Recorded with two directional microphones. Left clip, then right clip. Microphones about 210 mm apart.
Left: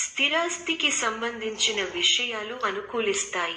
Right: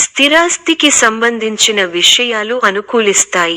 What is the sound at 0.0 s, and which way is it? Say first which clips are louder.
Speech: right 15 dB; 50° right (ahead or behind).